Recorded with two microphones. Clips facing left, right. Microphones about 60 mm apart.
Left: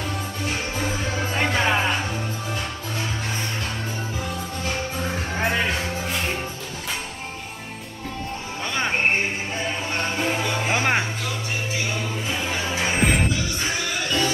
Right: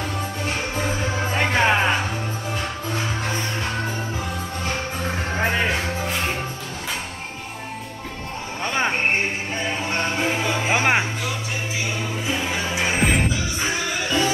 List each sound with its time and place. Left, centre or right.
0.5 s music: centre
4.9 s music: centre
8.6 s music: right
8.9 s a sound: centre
9.7 s music: centre